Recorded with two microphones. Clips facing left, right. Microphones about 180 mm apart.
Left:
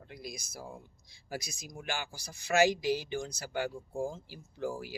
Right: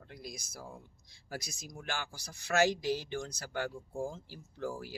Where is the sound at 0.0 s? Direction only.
10° left (ahead or behind).